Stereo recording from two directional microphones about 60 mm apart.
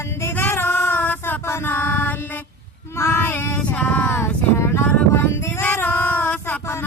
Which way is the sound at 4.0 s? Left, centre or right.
Left.